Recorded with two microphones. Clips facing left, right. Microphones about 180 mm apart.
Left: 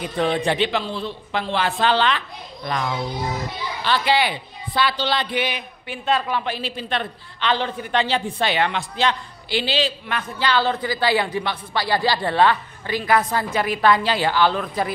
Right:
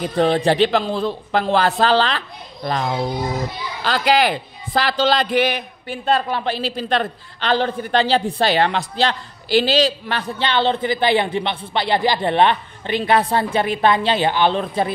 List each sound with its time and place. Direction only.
0.0 s a man's voice: 35° right (ahead or behind)
4.1 s a man's voice: 40° right (ahead or behind); by 14.9 s 25° right (ahead or behind)